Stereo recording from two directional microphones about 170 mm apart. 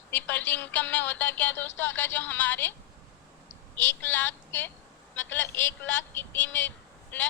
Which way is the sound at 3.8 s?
10° left (ahead or behind).